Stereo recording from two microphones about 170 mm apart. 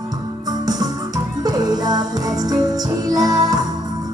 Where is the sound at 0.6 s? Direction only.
20° right (ahead or behind).